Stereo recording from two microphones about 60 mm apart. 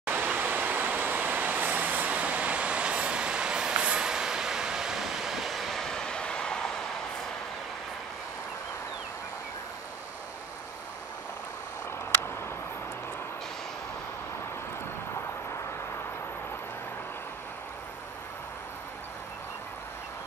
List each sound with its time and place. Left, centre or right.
0.0 s vehicle: right; by 6.7 s centre